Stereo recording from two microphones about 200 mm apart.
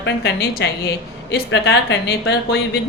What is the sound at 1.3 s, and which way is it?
A woman's voice, 65° left (ahead or behind).